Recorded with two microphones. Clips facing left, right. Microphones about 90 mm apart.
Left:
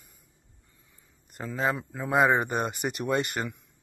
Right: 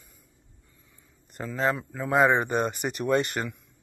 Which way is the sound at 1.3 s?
10° left (ahead or behind).